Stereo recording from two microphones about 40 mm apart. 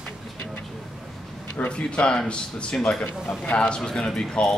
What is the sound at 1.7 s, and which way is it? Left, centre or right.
Speech, left.